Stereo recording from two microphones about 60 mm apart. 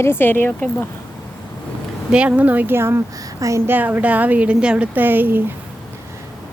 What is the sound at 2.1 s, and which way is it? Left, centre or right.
Speech, centre.